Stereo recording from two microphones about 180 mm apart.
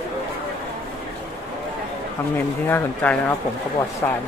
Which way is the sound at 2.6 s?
10° left (ahead or behind).